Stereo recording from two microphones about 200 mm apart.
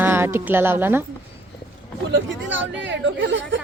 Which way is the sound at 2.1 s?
65° right (ahead or behind).